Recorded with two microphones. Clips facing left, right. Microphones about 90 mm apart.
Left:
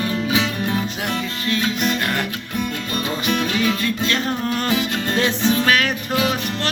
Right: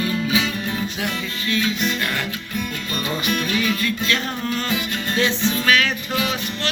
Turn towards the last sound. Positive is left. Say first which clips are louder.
# left 1 dB
turn(degrees=45)  # may be behind; listen again after turning